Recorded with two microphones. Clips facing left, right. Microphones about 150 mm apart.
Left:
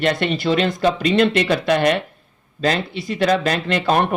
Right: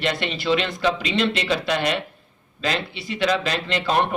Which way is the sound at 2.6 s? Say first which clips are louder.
Left 5 dB; 40° left (ahead or behind).